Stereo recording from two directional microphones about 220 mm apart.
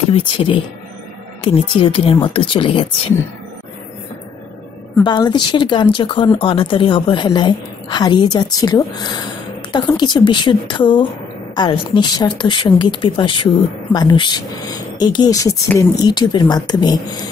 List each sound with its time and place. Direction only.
0.1 s speech: 25° left (ahead or behind)
5.0 s speech: 20° left (ahead or behind)